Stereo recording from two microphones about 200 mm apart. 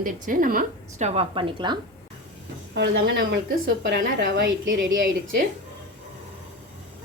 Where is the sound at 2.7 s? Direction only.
65° right (ahead or behind).